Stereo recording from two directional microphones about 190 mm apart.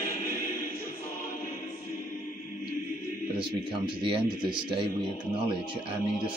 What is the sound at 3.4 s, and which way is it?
A man's voice, 25° right (ahead or behind).